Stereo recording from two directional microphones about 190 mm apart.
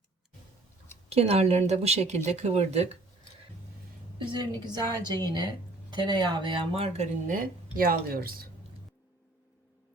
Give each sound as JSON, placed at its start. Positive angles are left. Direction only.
{"t": 1.1, "sound": "speech", "side_deg": -35}
{"t": 4.3, "sound": "a woman's voice", "side_deg": -20}